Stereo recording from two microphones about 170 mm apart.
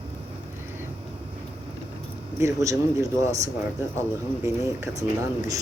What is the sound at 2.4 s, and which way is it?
Speech, 20° right (ahead or behind).